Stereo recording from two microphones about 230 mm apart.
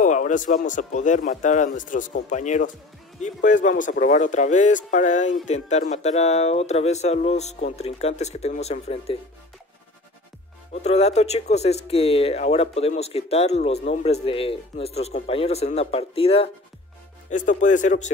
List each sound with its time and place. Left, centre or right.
0.0 s speech: left
10.7 s speech: left